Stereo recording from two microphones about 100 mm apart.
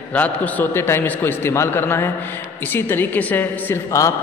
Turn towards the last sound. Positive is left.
turn(degrees=30)  # may be behind; listen again after turning